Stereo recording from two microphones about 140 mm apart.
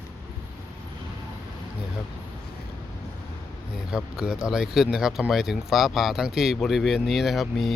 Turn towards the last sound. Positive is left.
turn(degrees=0)  # may be behind; listen again after turning